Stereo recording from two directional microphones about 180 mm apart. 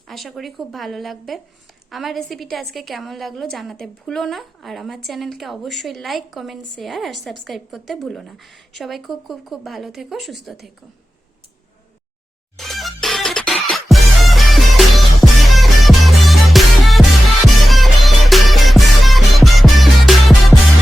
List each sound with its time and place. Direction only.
0.1 s a woman's voice: centre (ahead or behind)
12.5 s music: centre (ahead or behind)